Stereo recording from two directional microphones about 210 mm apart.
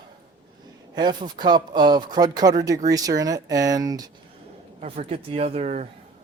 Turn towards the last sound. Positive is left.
turn(degrees=-30)  # may be behind; listen again after turning